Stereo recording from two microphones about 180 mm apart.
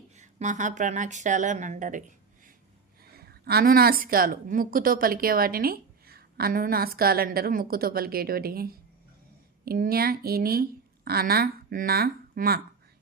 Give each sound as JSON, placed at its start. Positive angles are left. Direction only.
{"t": 0.2, "sound": "speech", "side_deg": -40}
{"t": 3.0, "sound": "a woman's voice", "side_deg": -60}